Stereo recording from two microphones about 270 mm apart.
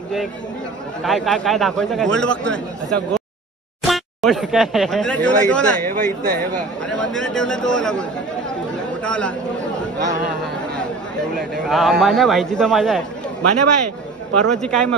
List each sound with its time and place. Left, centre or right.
1.0 s speech: centre
3.8 s speech: centre
11.3 s speech: centre
13.4 s a man's voice: right
14.5 s speech: centre